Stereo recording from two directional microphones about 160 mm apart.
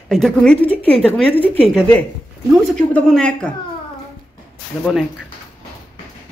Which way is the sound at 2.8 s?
5° left (ahead or behind).